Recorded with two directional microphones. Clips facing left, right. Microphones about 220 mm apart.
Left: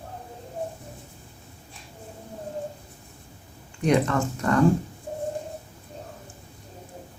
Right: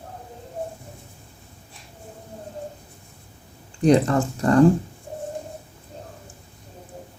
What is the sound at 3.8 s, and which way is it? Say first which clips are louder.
Speech: right 5 dB; 35° right (ahead or behind).